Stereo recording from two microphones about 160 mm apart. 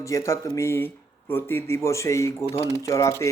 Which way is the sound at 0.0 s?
20° left (ahead or behind).